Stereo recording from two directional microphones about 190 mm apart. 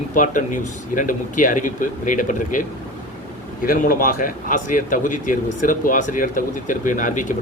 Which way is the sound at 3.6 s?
50° left (ahead or behind).